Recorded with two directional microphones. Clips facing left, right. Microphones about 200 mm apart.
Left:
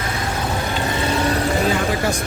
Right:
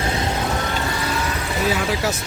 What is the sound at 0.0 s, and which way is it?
Vehicle, 25° right (ahead or behind).